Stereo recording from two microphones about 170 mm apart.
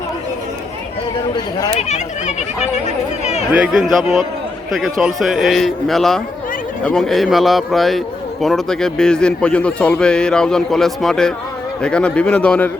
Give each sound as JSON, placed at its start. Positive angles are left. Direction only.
{"t": 1.7, "sound": "speech", "side_deg": 40}
{"t": 3.5, "sound": "a man's voice", "side_deg": -5}